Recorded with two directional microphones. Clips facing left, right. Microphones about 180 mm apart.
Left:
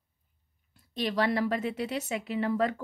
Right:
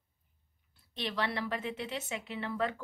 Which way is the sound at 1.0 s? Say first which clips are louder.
Left 7 dB; 40° left (ahead or behind).